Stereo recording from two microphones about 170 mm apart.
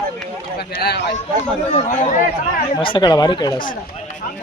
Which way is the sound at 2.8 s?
30° left (ahead or behind).